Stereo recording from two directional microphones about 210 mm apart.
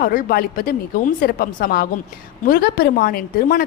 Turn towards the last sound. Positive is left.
turn(degrees=45)  # may be behind; listen again after turning